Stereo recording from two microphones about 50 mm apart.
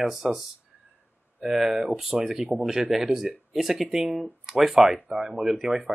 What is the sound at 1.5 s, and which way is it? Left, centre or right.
Speech, centre.